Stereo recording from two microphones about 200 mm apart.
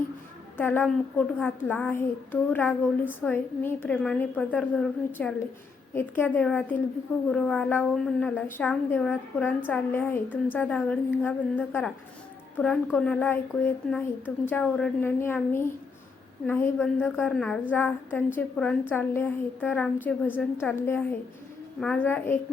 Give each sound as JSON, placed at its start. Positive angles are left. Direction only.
{"t": 0.5, "sound": "child singing", "side_deg": 10}
{"t": 7.3, "sound": "a woman's voice", "side_deg": 5}
{"t": 9.6, "sound": "child singing", "side_deg": 10}
{"t": 13.8, "sound": "a woman's voice", "side_deg": 5}
{"t": 14.4, "sound": "child singing", "side_deg": 5}